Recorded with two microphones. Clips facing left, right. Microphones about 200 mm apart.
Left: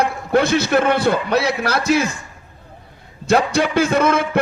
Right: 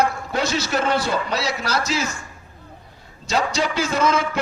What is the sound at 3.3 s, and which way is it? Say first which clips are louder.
A man's voice: left 6 dB; 55° left (ahead or behind).